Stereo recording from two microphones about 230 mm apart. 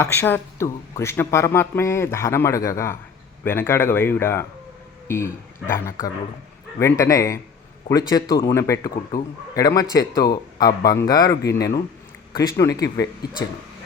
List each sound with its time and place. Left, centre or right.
0.0 s speech: centre